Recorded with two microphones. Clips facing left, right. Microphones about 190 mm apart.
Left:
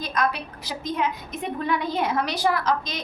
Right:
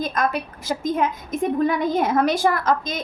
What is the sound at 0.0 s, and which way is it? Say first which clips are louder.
A woman's voice: right 3 dB; 50° right (ahead or behind).